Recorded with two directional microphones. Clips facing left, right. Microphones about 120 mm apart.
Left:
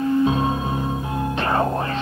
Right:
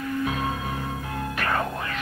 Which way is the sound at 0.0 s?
25° left (ahead or behind).